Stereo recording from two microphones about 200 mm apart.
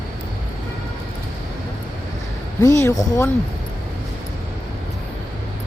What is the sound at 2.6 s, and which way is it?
Speech, 15° left (ahead or behind).